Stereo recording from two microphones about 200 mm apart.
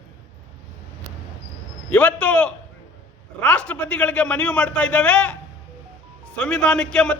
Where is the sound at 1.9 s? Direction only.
5° left (ahead or behind).